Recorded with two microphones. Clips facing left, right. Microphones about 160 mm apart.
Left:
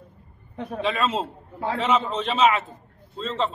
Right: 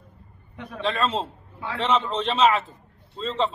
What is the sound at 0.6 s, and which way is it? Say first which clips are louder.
Speech: left 5 dB; 40° left (ahead or behind).